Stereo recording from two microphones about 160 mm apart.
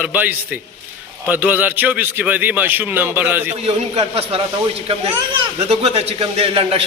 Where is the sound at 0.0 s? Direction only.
10° right (ahead or behind).